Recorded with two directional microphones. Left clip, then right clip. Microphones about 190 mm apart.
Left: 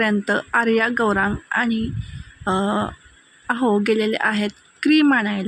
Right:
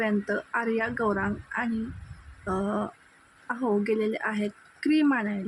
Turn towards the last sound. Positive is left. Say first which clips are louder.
# left 8 dB
turn(degrees=25)  # may be behind; listen again after turning